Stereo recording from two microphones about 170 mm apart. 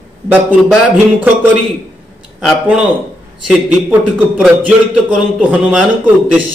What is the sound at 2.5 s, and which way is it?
A man's voice, 5° right (ahead or behind).